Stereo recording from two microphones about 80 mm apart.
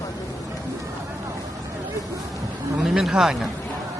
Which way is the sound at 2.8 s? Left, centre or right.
Centre.